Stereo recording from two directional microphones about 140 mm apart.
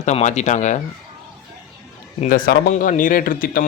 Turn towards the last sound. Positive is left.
turn(degrees=90)